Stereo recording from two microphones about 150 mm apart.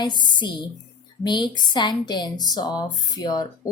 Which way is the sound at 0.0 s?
30° left (ahead or behind).